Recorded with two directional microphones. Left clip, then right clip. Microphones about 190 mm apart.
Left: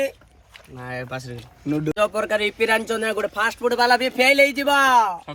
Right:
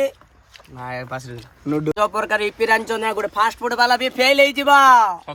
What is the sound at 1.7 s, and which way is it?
Speech, 30° right (ahead or behind).